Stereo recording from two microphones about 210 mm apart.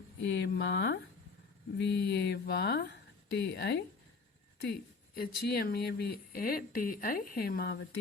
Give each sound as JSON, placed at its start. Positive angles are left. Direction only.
{"t": 0.3, "sound": "speech", "side_deg": 55}
{"t": 5.1, "sound": "speech", "side_deg": 45}